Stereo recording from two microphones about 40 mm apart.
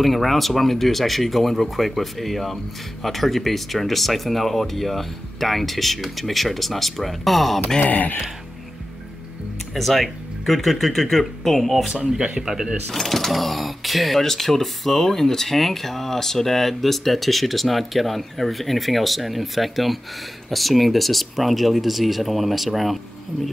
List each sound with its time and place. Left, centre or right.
0.0 s speech: centre
7.8 s speech: left
9.8 s speech: centre
11.9 s speech: centre
12.9 s speech: centre